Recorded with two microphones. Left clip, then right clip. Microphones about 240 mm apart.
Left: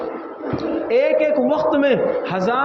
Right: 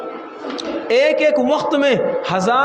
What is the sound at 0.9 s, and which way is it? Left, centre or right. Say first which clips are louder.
A man's voice: right 3 dB; right.